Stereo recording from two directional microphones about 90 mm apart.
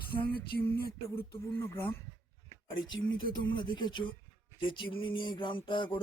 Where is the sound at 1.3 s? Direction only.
30° left (ahead or behind).